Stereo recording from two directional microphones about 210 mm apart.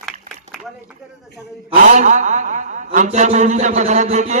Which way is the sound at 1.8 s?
35° right (ahead or behind).